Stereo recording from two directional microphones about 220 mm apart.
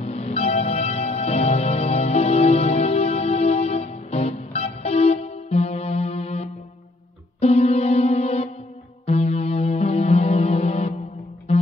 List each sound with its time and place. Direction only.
0.0 s music: 30° left (ahead or behind)